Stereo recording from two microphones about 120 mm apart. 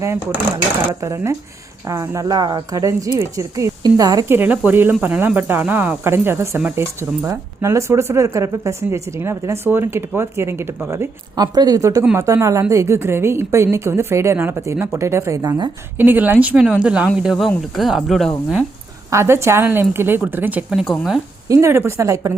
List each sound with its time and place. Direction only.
1.0 s a woman's voice: 25° right (ahead or behind)
4.3 s a woman's voice: 15° right (ahead or behind)
11.3 s a woman's voice: 35° right (ahead or behind)
16.0 s speech: 15° right (ahead or behind); by 18.3 s 5° left (ahead or behind)
19.1 s speech: 20° right (ahead or behind); by 21.2 s centre (ahead or behind)
21.5 s a woman's voice: 20° right (ahead or behind)